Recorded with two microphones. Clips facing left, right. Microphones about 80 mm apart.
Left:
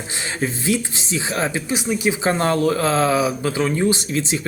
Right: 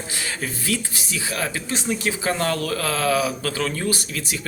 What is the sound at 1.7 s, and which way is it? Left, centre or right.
Speech, centre.